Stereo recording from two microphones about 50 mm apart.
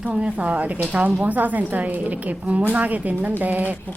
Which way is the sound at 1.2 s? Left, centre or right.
Right.